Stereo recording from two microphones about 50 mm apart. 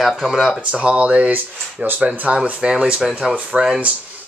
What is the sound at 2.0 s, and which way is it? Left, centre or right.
Speech, right.